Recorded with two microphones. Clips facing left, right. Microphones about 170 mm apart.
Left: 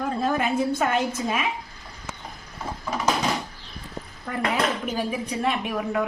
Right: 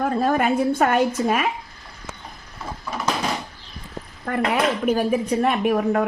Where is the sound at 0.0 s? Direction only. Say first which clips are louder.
Right 4 dB; 55° right (ahead or behind).